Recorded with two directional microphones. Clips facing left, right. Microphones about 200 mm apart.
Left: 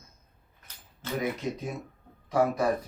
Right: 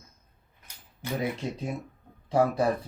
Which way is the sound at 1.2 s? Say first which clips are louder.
Left 1 dB; 30° right (ahead or behind).